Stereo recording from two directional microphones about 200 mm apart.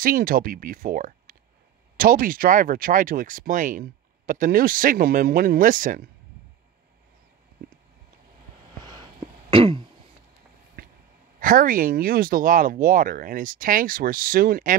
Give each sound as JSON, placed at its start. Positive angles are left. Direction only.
{"t": 0.0, "sound": "speech", "side_deg": -45}
{"t": 8.8, "sound": "throat clearing", "side_deg": -20}
{"t": 11.3, "sound": "speech", "side_deg": -45}